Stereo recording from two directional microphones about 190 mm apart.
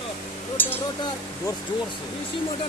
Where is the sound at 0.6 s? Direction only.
10° left (ahead or behind).